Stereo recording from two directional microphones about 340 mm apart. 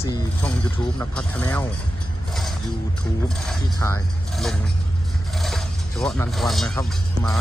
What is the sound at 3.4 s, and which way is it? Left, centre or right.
Speech, centre.